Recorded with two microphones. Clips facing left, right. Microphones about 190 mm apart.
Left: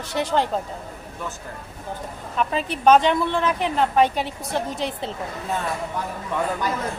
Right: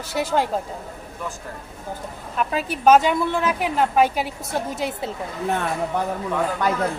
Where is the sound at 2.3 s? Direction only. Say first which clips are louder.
Even; 5° right (ahead or behind).